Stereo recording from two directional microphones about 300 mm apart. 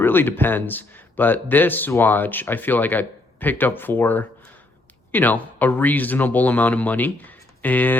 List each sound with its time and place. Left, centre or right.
0.0 s a man's voice: centre